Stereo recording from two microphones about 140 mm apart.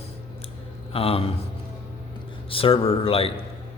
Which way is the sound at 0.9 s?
45° left (ahead or behind).